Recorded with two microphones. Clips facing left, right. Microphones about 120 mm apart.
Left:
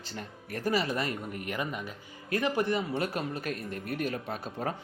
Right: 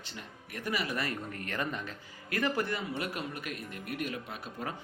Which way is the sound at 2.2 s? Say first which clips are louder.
Left 3 dB; 25° left (ahead or behind).